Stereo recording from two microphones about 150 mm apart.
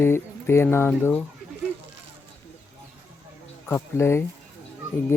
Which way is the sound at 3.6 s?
15° left (ahead or behind).